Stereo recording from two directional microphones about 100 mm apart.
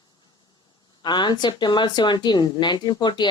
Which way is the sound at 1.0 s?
45° left (ahead or behind).